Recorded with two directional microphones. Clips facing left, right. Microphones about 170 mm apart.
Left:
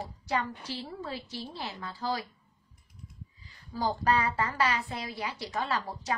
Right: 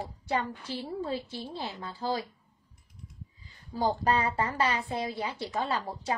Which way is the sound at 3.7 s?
20° right (ahead or behind).